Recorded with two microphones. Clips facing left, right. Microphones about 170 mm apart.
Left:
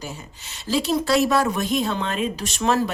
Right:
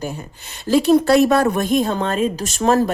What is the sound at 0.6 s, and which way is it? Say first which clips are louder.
Speech: right 8 dB; 55° right (ahead or behind).